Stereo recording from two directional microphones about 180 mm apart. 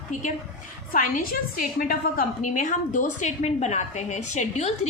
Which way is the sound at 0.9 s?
50° left (ahead or behind).